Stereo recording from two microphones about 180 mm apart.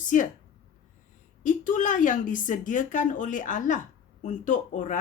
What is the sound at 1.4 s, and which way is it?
Speech, 45° left (ahead or behind).